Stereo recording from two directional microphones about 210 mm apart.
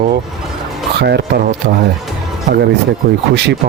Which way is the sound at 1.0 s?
55° right (ahead or behind).